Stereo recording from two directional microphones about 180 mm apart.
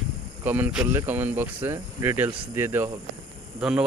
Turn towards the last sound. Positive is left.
turn(degrees=-5)  # may be behind; listen again after turning